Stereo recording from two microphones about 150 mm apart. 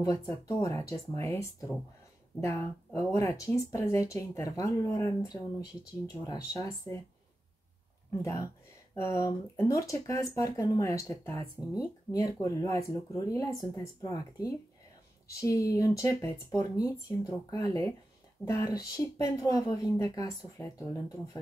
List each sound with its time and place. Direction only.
0.0 s speech: 20° left (ahead or behind)
3.1 s speech: 20° left (ahead or behind)
8.2 s speech: 20° left (ahead or behind)